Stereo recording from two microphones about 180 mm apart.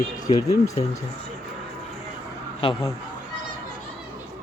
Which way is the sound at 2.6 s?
30° left (ahead or behind).